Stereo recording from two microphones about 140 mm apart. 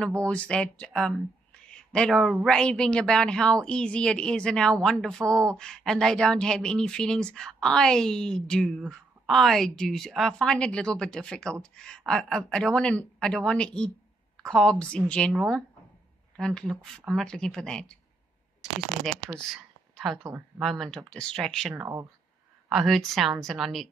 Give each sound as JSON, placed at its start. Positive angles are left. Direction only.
{"t": 0.2, "sound": "speech", "side_deg": 10}
{"t": 19.3, "sound": "a sound", "side_deg": 0}
{"t": 20.2, "sound": "speech", "side_deg": -15}
{"t": 20.6, "sound": "speech", "side_deg": 0}
{"t": 21.7, "sound": "speech", "side_deg": -20}
{"t": 22.7, "sound": "speech", "side_deg": 0}